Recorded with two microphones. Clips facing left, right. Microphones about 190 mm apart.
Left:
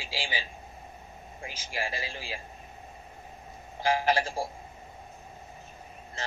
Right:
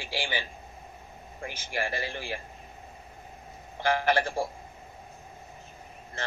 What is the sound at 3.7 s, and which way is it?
Speech, 60° right (ahead or behind).